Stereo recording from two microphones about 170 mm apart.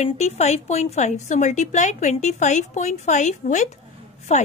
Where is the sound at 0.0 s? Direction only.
40° left (ahead or behind).